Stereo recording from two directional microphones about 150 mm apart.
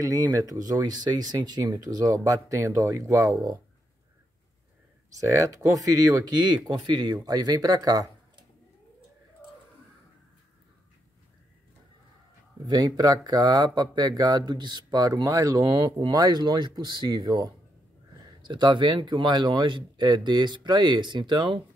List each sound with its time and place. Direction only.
0.0 s speech: 20° right (ahead or behind)
5.2 s speech: 20° right (ahead or behind)
12.6 s speech: 30° right (ahead or behind)